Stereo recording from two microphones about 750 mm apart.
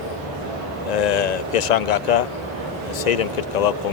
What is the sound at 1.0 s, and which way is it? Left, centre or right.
Speech, left.